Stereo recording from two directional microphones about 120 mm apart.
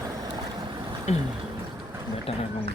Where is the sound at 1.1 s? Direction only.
70° left (ahead or behind).